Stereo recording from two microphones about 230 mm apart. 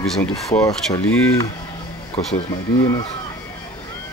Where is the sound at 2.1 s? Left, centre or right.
Left.